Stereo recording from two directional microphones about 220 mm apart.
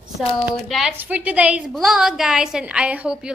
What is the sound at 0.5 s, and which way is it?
A woman's voice, centre (ahead or behind).